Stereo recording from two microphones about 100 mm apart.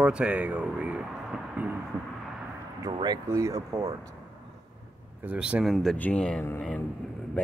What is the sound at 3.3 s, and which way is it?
Speech, 30° right (ahead or behind).